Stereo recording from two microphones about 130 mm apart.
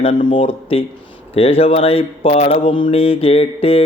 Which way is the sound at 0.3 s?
45° left (ahead or behind).